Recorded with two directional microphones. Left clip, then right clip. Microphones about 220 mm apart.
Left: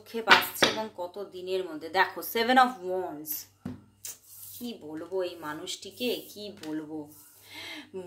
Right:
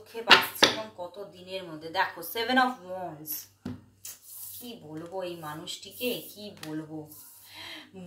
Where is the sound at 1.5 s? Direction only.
45° left (ahead or behind).